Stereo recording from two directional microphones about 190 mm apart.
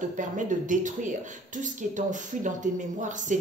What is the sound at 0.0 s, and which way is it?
Speech, 40° right (ahead or behind).